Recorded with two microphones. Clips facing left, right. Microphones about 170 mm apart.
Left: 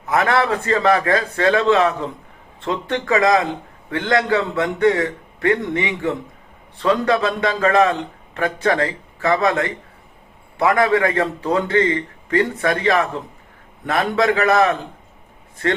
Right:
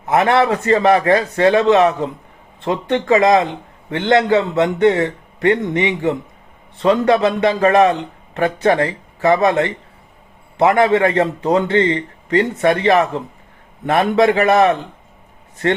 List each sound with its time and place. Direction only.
0.1 s a man's voice: 25° right (ahead or behind)